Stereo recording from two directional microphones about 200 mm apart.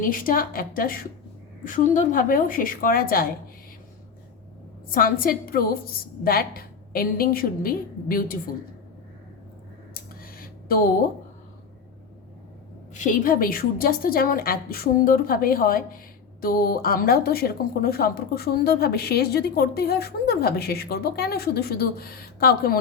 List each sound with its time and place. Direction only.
0.0 s speech: 45° left (ahead or behind)
4.9 s speech: 45° left (ahead or behind)
9.9 s a sound: 45° left (ahead or behind)
12.9 s speech: 40° left (ahead or behind)